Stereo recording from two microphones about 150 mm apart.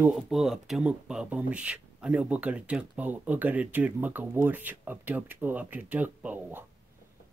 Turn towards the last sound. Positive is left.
turn(degrees=-10)  # may be behind; listen again after turning